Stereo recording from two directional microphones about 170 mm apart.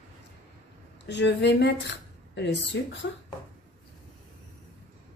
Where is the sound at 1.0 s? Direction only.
90° left.